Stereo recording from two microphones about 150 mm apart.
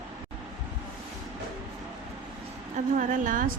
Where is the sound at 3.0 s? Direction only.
60° right (ahead or behind).